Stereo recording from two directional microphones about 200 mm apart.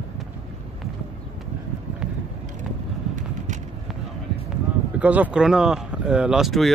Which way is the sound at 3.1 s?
40° right (ahead or behind).